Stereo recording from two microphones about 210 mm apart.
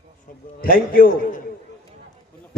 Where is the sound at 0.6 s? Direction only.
45° left (ahead or behind).